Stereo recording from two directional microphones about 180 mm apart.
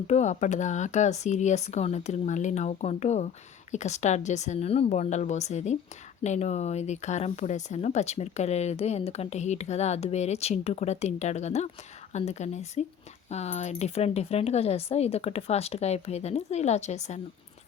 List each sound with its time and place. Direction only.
0.1 s speech: 40° left (ahead or behind)